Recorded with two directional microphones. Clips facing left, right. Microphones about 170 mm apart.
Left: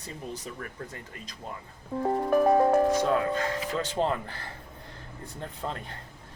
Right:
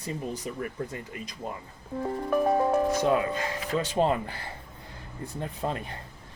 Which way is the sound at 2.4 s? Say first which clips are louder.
Left 2 dB; 50° left (ahead or behind).